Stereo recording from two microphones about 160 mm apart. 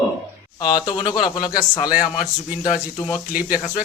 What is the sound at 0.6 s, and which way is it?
Speech, 25° left (ahead or behind).